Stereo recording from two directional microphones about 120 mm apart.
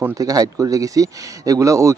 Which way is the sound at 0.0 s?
30° right (ahead or behind).